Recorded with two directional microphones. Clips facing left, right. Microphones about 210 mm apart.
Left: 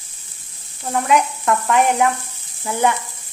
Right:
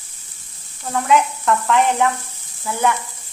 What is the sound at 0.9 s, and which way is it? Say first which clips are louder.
Speech: even; 15° left (ahead or behind).